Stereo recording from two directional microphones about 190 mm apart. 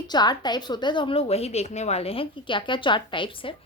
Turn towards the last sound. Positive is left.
turn(degrees=25)  # may be behind; listen again after turning